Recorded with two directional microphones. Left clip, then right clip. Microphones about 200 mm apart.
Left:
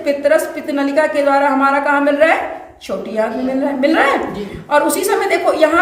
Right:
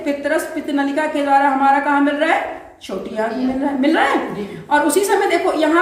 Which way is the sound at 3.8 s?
55° left (ahead or behind).